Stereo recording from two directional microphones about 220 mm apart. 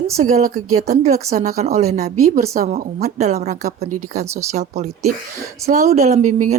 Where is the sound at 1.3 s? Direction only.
40° right (ahead or behind).